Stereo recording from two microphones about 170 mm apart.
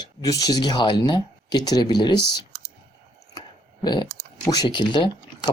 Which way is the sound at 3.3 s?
25° left (ahead or behind).